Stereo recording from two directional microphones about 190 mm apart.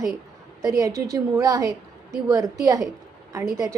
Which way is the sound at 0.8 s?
15° right (ahead or behind).